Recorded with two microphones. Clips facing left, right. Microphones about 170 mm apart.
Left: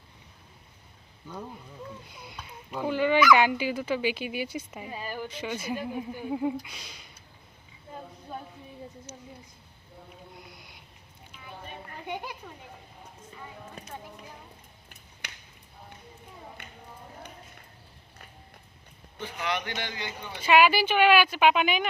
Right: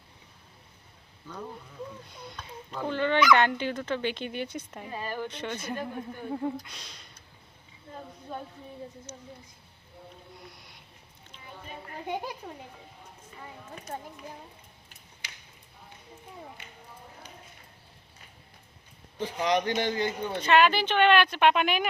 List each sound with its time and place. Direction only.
2.0 s speech: 5° left (ahead or behind)
10.4 s owl: centre (ahead or behind)
15.2 s finger snapping: 60° left (ahead or behind)
19.2 s speech: 35° right (ahead or behind)
20.4 s a woman's voice: 5° left (ahead or behind)